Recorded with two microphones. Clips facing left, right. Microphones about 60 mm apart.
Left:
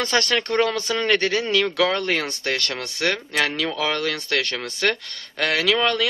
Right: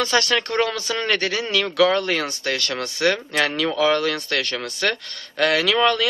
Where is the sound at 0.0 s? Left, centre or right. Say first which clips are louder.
Right 1 dB; centre.